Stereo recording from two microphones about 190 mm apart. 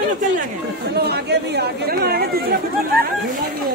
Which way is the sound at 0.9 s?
55° right (ahead or behind).